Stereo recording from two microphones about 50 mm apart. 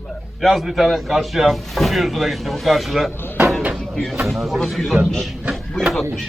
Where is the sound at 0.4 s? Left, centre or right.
Centre.